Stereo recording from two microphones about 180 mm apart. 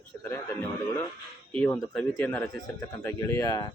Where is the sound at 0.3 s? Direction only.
10° left (ahead or behind).